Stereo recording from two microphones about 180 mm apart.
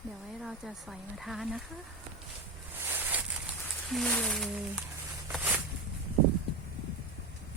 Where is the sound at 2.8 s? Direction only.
10° right (ahead or behind).